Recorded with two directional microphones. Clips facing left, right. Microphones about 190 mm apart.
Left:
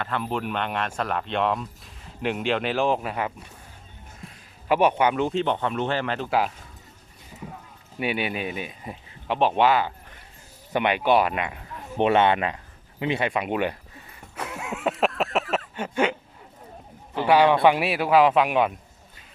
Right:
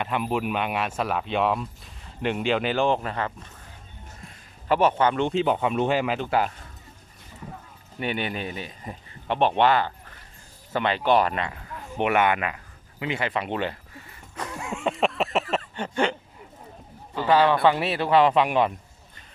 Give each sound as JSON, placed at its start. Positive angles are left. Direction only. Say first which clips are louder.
{"t": 0.0, "sound": "speech", "louder": "right 2 dB", "side_deg": -15}
{"t": 4.2, "sound": "a sound", "louder": "left 2 dB", "side_deg": 0}
{"t": 4.8, "sound": "speech", "louder": "even", "side_deg": 15}
{"t": 6.1, "sound": "speech", "louder": "even", "side_deg": 0}
{"t": 7.9, "sound": "speech", "louder": "left 2 dB", "side_deg": 10}
{"t": 10.7, "sound": "speech", "louder": "left 1 dB", "side_deg": 15}
{"t": 13.3, "sound": "speech", "louder": "left 2 dB", "side_deg": 15}
{"t": 14.3, "sound": "a sound", "louder": "even", "side_deg": 5}
{"t": 17.2, "sound": "speech", "louder": "left 2 dB", "side_deg": 15}